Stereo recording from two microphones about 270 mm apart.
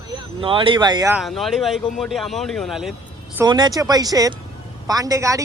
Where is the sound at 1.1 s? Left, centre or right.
Centre.